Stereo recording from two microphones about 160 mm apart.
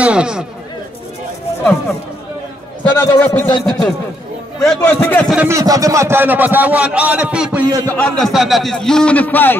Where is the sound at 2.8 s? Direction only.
10° left (ahead or behind).